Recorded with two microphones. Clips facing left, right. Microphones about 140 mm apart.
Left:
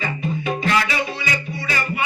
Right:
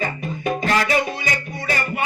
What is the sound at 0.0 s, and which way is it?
Music, 45° right (ahead or behind).